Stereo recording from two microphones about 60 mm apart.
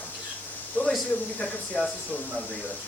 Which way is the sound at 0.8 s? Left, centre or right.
Left.